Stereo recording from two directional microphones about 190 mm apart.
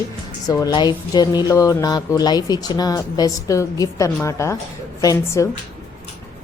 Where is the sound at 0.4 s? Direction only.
20° left (ahead or behind).